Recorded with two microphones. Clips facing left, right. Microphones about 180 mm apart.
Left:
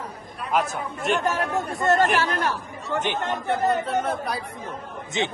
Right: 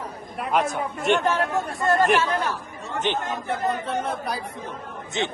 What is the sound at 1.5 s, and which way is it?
Speech, 20° left (ahead or behind).